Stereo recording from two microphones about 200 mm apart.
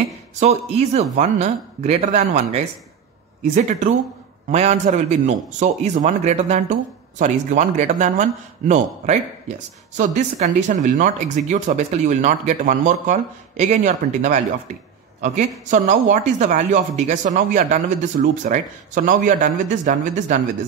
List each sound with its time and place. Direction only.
0.4 s a man's voice: 30° right (ahead or behind)
15.6 s a man's voice: 40° right (ahead or behind)